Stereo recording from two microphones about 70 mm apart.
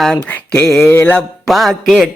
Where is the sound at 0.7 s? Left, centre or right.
Left.